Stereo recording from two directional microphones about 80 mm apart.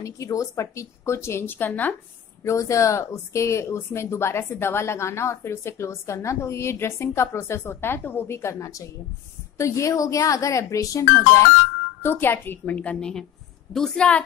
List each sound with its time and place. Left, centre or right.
0.0 s speech: left
2.4 s a woman's voice: left
12.0 s a woman's voice: left; by 14.2 s centre